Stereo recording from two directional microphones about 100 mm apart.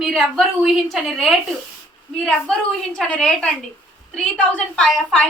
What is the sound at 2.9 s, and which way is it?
A woman's voice, 10° left (ahead or behind).